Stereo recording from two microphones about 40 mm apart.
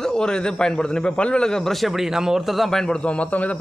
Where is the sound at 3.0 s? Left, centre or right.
Left.